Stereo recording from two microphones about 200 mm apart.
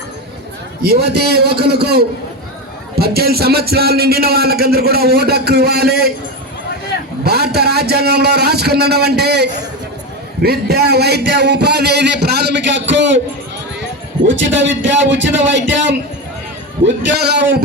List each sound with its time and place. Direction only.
0.8 s a man's voice: 50° right (ahead or behind)
7.3 s a man's voice: 50° right (ahead or behind)
14.3 s a man's voice: 65° right (ahead or behind)
16.8 s a man's voice: 55° right (ahead or behind)